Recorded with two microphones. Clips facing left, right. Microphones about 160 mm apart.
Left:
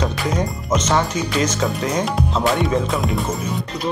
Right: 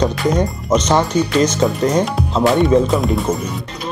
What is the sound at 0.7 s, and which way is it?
Speech, 35° right (ahead or behind).